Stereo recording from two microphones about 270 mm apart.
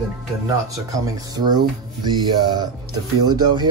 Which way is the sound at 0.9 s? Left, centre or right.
Centre.